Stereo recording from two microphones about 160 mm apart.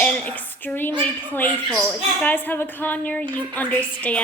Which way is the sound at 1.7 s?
Centre (ahead or behind).